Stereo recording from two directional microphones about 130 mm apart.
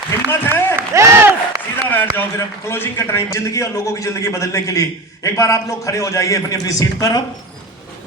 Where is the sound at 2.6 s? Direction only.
15° left (ahead or behind).